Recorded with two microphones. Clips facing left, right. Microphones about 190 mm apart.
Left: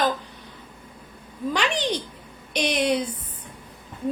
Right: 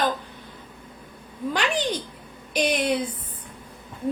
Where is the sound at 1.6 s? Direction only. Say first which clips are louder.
Even; 50° right (ahead or behind).